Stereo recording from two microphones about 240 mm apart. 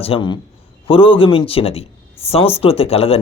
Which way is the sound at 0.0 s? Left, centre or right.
Left.